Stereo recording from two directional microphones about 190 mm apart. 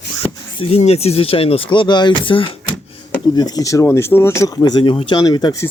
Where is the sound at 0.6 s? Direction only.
35° left (ahead or behind).